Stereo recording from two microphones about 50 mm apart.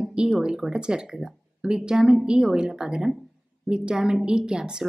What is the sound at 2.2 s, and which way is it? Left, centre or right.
Speech, centre.